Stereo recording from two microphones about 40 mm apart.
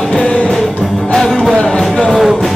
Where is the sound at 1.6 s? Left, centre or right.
Centre.